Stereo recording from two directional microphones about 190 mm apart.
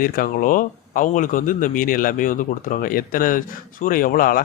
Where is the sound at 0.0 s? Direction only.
45° left (ahead or behind).